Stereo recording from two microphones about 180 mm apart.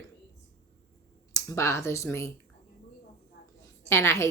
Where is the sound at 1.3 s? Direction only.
15° left (ahead or behind).